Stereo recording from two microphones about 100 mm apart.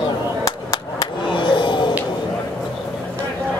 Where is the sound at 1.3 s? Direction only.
55° left (ahead or behind).